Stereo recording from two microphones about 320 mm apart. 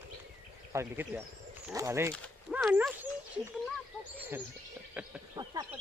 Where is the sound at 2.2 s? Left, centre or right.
Centre.